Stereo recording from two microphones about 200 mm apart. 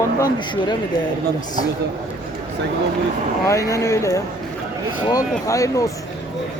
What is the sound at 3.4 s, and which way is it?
Speech, 15° left (ahead or behind).